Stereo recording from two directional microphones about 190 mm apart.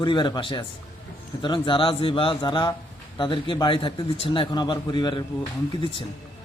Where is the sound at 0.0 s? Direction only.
25° left (ahead or behind).